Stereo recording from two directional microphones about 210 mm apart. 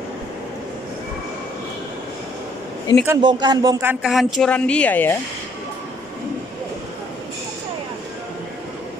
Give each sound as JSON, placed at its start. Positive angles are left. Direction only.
{"t": 3.1, "sound": "speech", "side_deg": -20}
{"t": 3.9, "sound": "a woman's voice", "side_deg": -5}